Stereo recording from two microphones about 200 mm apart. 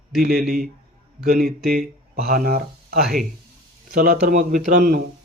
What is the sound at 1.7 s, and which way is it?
Speech, 50° right (ahead or behind).